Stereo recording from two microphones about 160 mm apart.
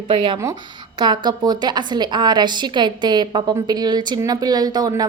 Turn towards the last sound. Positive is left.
turn(degrees=-25)  # may be behind; listen again after turning